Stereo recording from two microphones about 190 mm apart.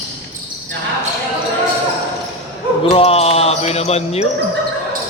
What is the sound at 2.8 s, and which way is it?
Speech, 30° left (ahead or behind).